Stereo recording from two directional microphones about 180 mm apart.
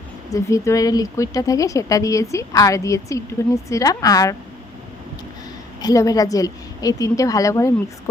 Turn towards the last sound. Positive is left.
turn(degrees=15)  # may be behind; listen again after turning